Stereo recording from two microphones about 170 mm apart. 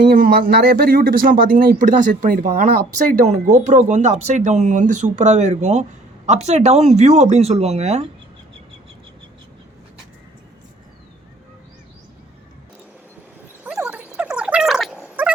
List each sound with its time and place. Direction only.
0.0 s speech: 55° right (ahead or behind); by 8.0 s 40° right (ahead or behind)
13.7 s gargling: 5° right (ahead or behind)